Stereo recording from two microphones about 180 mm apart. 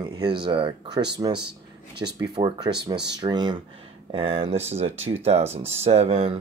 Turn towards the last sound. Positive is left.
turn(degrees=-35)  # may be behind; listen again after turning